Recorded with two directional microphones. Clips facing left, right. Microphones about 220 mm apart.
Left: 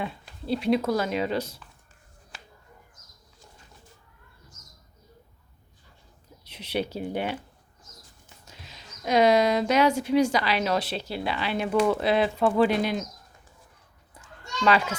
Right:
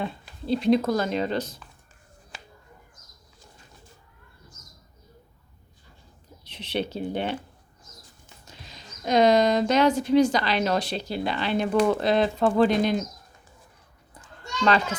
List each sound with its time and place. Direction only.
0.0 s a sound: 5° left (ahead or behind)
0.9 s a woman's voice: 10° left (ahead or behind)
6.4 s speech: 10° left (ahead or behind)
8.4 s a woman's voice: 5° left (ahead or behind)
14.6 s a woman's voice: 10° left (ahead or behind)